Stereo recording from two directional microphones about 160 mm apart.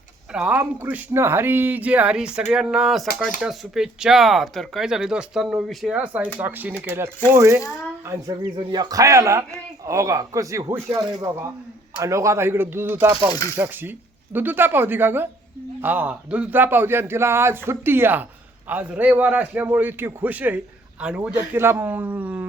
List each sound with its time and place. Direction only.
0.3 s a man's voice: 10° right (ahead or behind)